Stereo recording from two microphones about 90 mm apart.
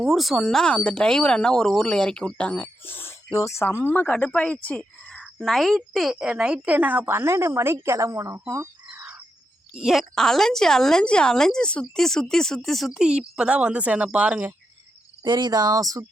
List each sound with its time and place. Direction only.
0.0 s a woman's voice: centre (ahead or behind); by 9.2 s 20° right (ahead or behind)
9.8 s speech: centre (ahead or behind)
15.2 s speech: 55° right (ahead or behind)